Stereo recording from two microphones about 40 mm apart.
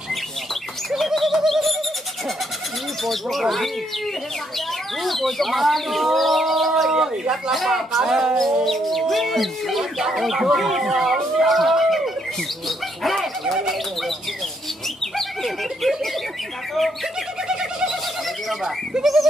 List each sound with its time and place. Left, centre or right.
0.8 s bird: centre
3.0 s speech: centre
7.5 s speech: centre
8.0 s speech: centre
8.4 s speech: centre
11.4 s a sound: centre
12.6 s bird: centre
15.1 s bird: centre
17.5 s bird: centre
18.9 s speech: centre